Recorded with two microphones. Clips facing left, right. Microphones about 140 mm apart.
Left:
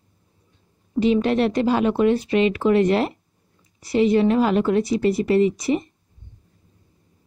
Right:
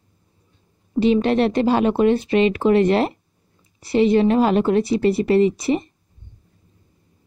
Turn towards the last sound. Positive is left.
turn(degrees=-25)  # may be behind; listen again after turning